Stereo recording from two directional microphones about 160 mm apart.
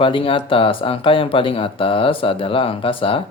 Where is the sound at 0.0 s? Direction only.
35° left (ahead or behind).